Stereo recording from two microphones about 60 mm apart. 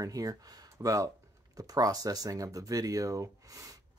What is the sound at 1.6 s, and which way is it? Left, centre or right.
Speech, right.